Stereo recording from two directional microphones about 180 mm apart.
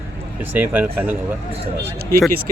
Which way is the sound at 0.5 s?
10° right (ahead or behind).